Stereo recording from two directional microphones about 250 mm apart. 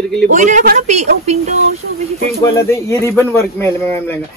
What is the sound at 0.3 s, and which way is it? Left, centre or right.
Speech, right.